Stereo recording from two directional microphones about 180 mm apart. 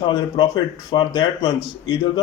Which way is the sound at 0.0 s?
25° left (ahead or behind).